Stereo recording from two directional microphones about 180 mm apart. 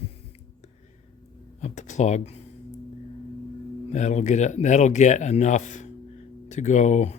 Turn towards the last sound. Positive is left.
turn(degrees=40)  # may be behind; listen again after turning